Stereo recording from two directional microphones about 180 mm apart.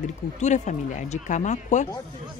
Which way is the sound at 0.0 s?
40° left (ahead or behind).